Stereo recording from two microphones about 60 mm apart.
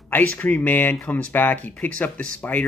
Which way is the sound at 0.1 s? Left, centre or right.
Left.